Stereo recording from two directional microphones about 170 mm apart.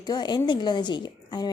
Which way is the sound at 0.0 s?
25° left (ahead or behind).